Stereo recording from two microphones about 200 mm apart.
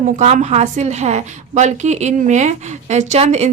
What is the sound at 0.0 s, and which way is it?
A woman's voice, 35° right (ahead or behind).